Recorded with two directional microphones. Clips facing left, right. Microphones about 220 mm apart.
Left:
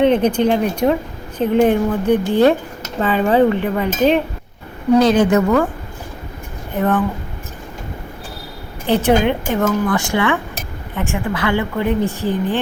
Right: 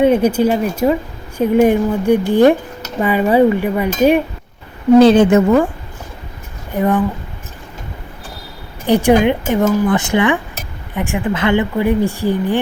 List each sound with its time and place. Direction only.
0.0 s speech: 10° right (ahead or behind)
4.9 s a woman's voice: 30° right (ahead or behind)
6.7 s speech: 10° right (ahead or behind)
8.9 s speech: 15° right (ahead or behind)